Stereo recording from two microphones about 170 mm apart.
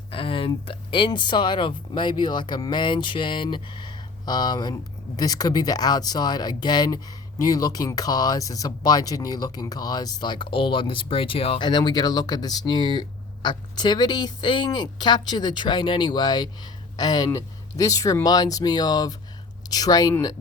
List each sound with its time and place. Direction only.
0.1 s speech: 30° left (ahead or behind)